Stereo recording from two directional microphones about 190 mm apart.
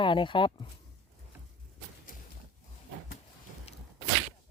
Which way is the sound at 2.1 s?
45° left (ahead or behind).